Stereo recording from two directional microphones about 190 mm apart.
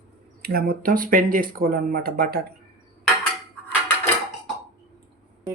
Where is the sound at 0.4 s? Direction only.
50° right (ahead or behind).